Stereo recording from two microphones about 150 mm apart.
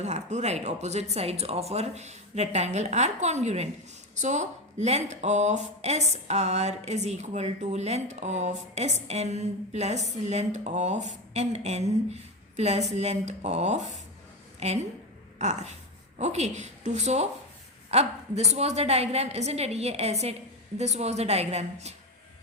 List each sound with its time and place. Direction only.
0.0 s a woman's voice: 50° right (ahead or behind)